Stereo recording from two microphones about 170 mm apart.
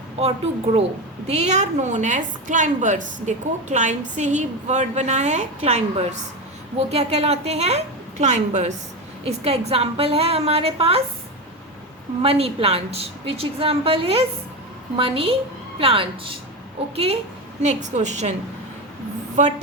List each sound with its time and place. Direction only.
0.2 s a woman's voice: 35° right (ahead or behind)
12.2 s a woman's voice: 35° right (ahead or behind)
19.4 s a woman's voice: 45° right (ahead or behind)